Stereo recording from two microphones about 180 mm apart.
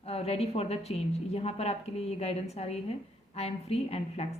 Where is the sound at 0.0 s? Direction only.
35° left (ahead or behind).